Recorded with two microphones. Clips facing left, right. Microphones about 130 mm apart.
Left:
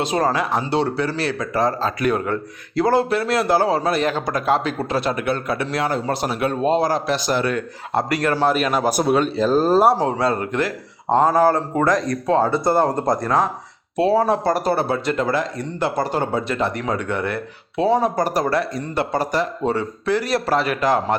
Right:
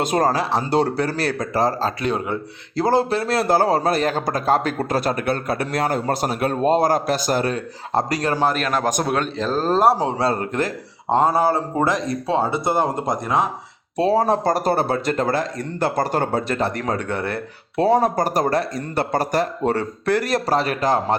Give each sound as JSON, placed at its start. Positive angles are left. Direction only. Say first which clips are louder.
{"t": 0.0, "sound": "speech", "louder": "right 1 dB", "side_deg": -45}
{"t": 2.7, "sound": "a man's voice", "louder": "left 1 dB", "side_deg": -35}
{"t": 8.4, "sound": "a man's voice", "louder": "left 2 dB", "side_deg": 5}
{"t": 10.2, "sound": "speech", "louder": "left 1 dB", "side_deg": -35}
{"t": 11.4, "sound": "speech", "louder": "left 2 dB", "side_deg": -25}
{"t": 13.9, "sound": "a man's voice", "louder": "left 1 dB", "side_deg": -40}